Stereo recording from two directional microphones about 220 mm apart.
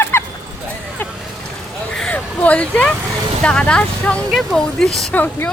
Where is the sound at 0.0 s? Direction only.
10° left (ahead or behind).